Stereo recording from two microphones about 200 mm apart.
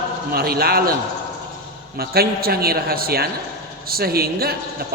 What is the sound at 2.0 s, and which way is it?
A man's voice, 50° right (ahead or behind).